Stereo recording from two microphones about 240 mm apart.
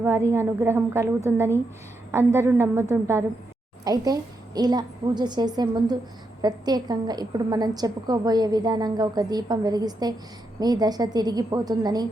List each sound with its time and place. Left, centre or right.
0.0 s a woman's voice: centre